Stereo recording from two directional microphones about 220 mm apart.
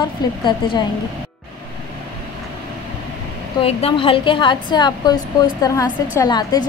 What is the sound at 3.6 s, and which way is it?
A woman's voice, 25° left (ahead or behind).